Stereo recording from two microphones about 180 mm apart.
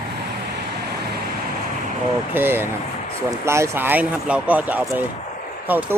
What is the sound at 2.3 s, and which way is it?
Speech, 10° right (ahead or behind).